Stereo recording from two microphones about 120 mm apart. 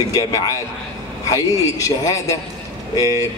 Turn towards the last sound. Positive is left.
turn(degrees=30)  # may be behind; listen again after turning